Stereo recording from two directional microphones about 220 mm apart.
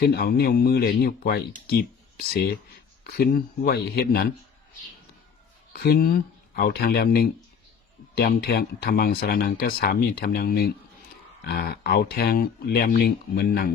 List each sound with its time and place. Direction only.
0.0 s speech: 45° left (ahead or behind)
5.7 s speech: 45° left (ahead or behind)
8.4 s speech: 45° left (ahead or behind)